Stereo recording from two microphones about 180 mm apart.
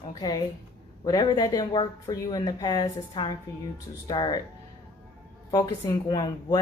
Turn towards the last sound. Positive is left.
turn(degrees=20)  # may be behind; listen again after turning